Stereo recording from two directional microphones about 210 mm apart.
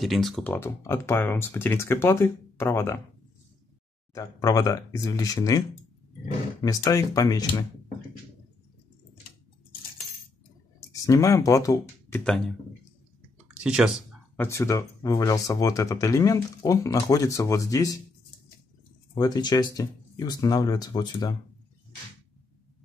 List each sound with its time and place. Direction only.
0.0 s speech: centre (ahead or behind)
4.1 s speech: 15° left (ahead or behind)
6.6 s speech: 15° left (ahead or behind)
10.9 s speech: 15° left (ahead or behind)
13.5 s speech: 5° right (ahead or behind)
14.3 s speech: 10° left (ahead or behind)
19.1 s speech: 20° left (ahead or behind)